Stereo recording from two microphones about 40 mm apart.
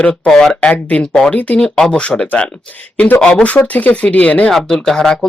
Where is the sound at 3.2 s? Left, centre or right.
Left.